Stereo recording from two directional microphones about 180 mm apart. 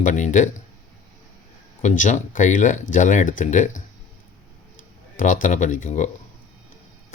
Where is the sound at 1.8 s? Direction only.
45° left (ahead or behind).